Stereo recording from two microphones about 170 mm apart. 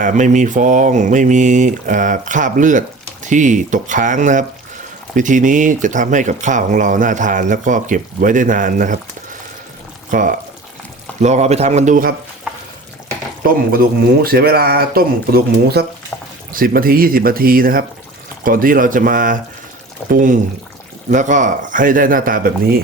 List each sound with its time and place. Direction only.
0.0 s speech: 50° right (ahead or behind)
10.1 s a man's voice: 50° right (ahead or behind)
13.7 s speech: 60° right (ahead or behind)